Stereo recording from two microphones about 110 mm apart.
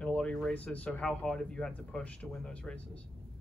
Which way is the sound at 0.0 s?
10° left (ahead or behind).